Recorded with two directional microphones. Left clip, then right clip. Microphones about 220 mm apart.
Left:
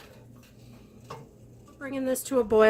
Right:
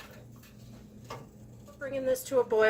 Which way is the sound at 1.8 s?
50° left (ahead or behind).